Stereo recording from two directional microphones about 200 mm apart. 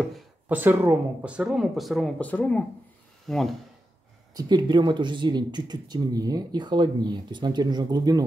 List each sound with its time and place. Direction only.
0.0 s speech: 5° right (ahead or behind)
4.3 s speech: 20° right (ahead or behind)